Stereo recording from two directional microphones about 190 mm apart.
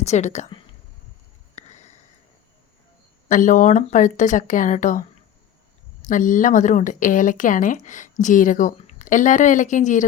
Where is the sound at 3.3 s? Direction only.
40° left (ahead or behind).